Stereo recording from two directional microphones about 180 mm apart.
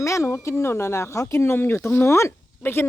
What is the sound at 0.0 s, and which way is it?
Speech, 15° left (ahead or behind).